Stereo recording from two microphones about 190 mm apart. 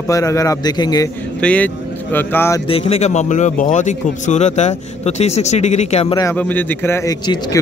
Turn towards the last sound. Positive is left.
turn(degrees=20)  # may be behind; listen again after turning